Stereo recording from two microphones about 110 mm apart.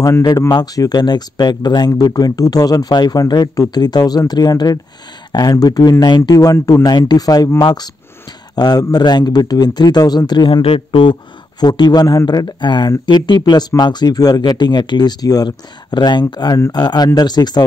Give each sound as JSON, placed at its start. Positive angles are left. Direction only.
{"t": 0.5, "sound": "speech", "side_deg": 40}
{"t": 11.6, "sound": "speech", "side_deg": 40}